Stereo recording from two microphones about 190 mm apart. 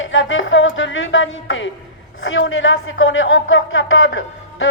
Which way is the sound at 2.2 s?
90° left.